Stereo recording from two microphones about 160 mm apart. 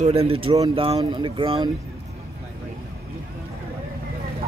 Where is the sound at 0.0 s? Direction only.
40° right (ahead or behind).